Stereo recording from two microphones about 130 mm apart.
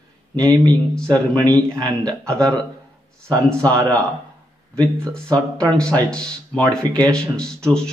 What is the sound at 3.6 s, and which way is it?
Speech, 25° right (ahead or behind).